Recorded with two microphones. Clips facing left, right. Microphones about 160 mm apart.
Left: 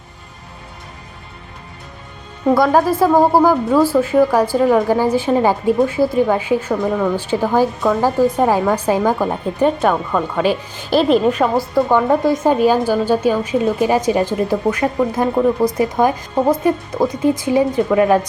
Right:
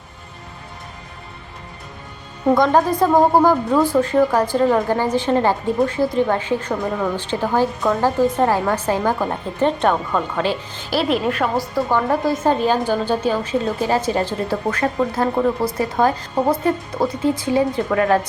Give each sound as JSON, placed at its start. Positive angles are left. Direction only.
{"t": 2.6, "sound": "a woman's voice", "side_deg": 5}
{"t": 10.9, "sound": "a woman's voice", "side_deg": 0}
{"t": 11.5, "sound": "a woman's voice", "side_deg": 20}